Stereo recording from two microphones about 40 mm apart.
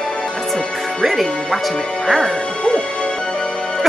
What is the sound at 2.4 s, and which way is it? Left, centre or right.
Music, left.